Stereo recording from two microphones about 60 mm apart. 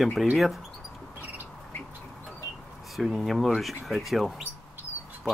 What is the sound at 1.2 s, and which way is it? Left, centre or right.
Squawk, right.